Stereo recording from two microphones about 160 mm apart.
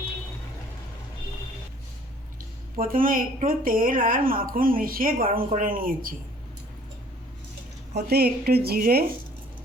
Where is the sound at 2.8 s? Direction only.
60° right (ahead or behind).